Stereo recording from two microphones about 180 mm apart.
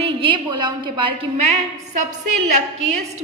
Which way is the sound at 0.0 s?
30° right (ahead or behind).